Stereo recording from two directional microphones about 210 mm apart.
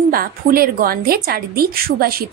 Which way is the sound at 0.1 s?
45° right (ahead or behind).